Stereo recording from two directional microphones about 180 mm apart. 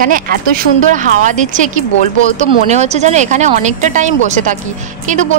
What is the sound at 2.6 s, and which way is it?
A woman's voice, 40° right (ahead or behind).